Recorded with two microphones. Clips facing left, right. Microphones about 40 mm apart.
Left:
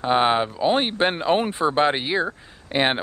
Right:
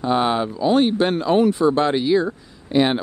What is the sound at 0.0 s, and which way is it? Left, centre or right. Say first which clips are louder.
Speech: even; left.